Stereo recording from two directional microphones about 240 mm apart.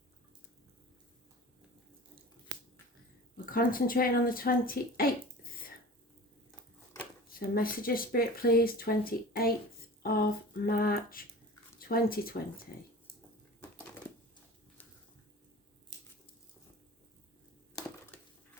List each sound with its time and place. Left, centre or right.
3.3 s speech: left
7.3 s speech: left